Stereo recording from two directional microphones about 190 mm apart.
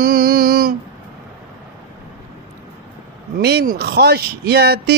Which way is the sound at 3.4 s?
60° right (ahead or behind).